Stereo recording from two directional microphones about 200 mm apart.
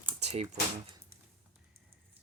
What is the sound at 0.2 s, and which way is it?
Typing, 30° right (ahead or behind).